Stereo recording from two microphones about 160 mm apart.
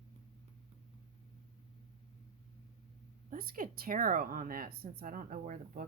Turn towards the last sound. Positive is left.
turn(degrees=-55)  # may be behind; listen again after turning